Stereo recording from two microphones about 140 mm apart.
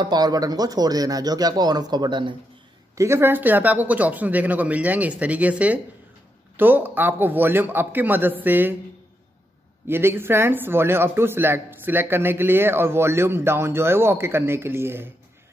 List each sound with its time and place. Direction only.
0.0 s speech: 30° right (ahead or behind)
3.0 s speech: 15° right (ahead or behind)
9.8 s speech: 15° right (ahead or behind)